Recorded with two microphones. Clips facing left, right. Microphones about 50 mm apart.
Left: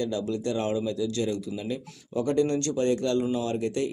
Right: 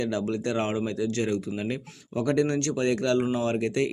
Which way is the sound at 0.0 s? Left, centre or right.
Right.